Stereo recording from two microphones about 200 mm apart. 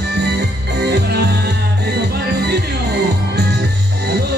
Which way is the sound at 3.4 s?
55° right (ahead or behind).